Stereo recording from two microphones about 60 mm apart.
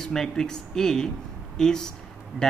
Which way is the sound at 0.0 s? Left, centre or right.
Centre.